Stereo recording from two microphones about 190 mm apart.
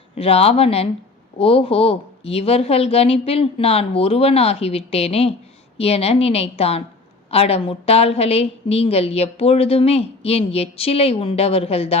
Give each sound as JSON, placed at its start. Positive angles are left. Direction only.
{"t": 0.2, "sound": "a woman's voice", "side_deg": 30}